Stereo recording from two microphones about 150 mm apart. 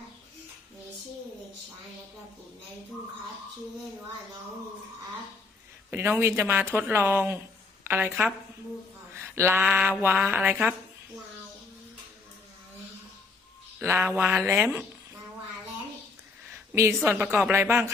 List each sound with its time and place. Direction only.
5.9 s speech: 15° right (ahead or behind)
9.1 s a sound: 15° right (ahead or behind)
10.0 s speech: 10° right (ahead or behind)
13.7 s speech: 15° right (ahead or behind)
16.9 s a woman's voice: 5° right (ahead or behind)